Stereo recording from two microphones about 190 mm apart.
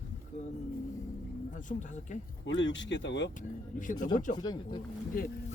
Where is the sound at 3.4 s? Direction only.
45° left (ahead or behind).